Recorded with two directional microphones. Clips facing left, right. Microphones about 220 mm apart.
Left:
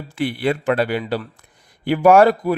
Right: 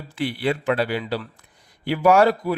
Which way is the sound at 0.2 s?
50° left (ahead or behind).